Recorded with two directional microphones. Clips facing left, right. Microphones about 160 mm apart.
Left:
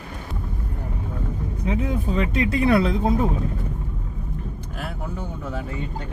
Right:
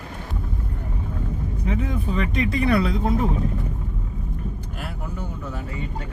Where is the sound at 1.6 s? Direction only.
30° left (ahead or behind).